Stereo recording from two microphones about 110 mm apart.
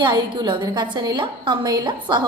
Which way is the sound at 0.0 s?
45° right (ahead or behind).